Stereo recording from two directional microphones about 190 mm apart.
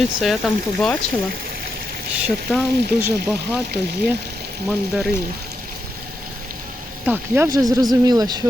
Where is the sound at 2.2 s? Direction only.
5° right (ahead or behind).